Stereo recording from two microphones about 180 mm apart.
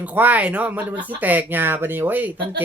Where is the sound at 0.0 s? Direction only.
10° right (ahead or behind).